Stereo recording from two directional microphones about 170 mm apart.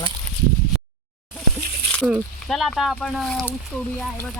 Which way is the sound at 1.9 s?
5° left (ahead or behind).